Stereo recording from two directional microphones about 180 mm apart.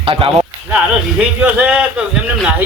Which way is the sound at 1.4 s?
10° right (ahead or behind).